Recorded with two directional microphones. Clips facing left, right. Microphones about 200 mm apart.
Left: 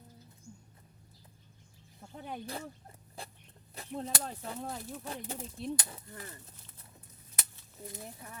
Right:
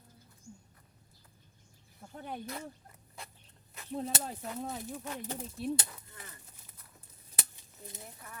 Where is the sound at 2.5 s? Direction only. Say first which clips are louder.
Left 1 dB; 30° left (ahead or behind).